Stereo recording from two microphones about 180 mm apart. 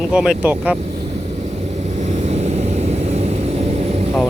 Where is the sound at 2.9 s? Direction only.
35° right (ahead or behind).